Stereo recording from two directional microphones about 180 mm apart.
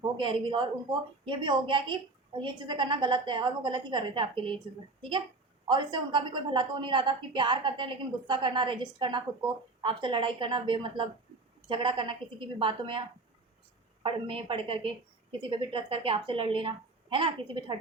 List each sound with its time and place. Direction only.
0.0 s a woman's voice: 25° right (ahead or behind)
5.6 s a woman's voice: 25° right (ahead or behind)
14.0 s a woman's voice: 30° right (ahead or behind)